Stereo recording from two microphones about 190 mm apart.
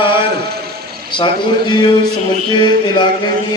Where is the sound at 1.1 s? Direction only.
25° left (ahead or behind).